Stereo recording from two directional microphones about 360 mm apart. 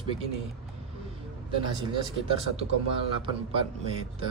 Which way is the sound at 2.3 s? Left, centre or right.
Centre.